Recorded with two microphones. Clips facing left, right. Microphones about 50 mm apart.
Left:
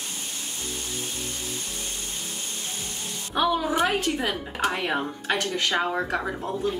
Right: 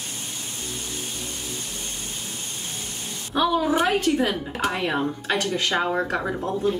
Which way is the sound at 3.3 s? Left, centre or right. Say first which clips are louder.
Right 2 dB; centre.